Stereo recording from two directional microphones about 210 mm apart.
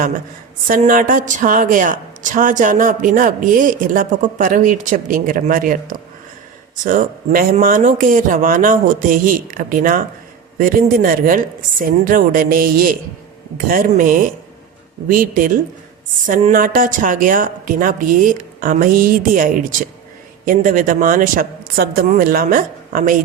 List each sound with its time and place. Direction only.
0.7 s speech: 40° right (ahead or behind)